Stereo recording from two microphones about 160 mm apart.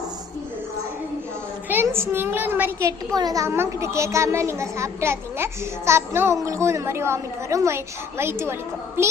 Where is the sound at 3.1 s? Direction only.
25° right (ahead or behind).